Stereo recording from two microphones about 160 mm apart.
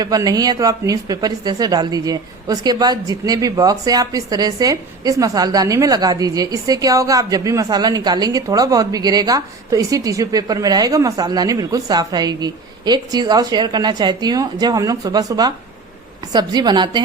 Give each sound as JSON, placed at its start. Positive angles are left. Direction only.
{"t": 0.0, "sound": "a woman's voice", "side_deg": -25}